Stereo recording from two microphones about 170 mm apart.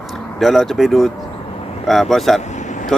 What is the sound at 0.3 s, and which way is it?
Speech, centre (ahead or behind).